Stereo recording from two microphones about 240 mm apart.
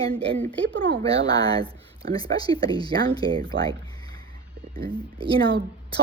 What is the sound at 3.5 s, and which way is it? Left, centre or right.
Speech, right.